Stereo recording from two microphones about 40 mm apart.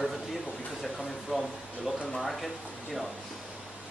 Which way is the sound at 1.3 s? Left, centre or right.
Centre.